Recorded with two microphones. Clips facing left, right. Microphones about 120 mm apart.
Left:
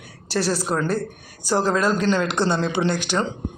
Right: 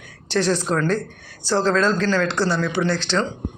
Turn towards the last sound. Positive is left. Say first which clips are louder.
# right 1 dB
turn(degrees=15)  # may be behind; listen again after turning